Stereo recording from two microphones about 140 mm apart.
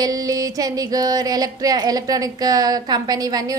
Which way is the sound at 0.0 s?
25° right (ahead or behind).